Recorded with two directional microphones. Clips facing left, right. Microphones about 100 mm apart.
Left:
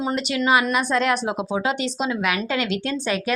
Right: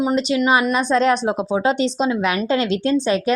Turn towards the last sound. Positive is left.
turn(degrees=-25)  # may be behind; listen again after turning